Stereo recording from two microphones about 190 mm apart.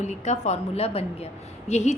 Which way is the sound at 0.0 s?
40° left (ahead or behind).